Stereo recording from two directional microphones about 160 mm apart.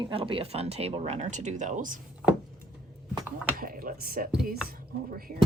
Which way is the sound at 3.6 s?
65° right (ahead or behind).